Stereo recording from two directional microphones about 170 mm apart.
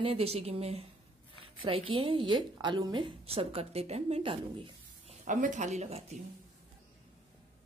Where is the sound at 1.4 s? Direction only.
30° right (ahead or behind).